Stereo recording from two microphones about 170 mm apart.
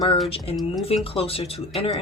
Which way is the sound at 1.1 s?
35° left (ahead or behind).